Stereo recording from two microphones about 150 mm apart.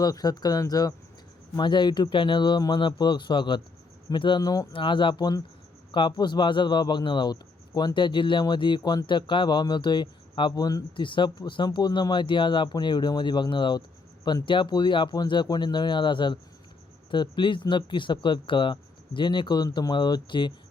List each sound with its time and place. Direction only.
0.0 s speech: 25° left (ahead or behind)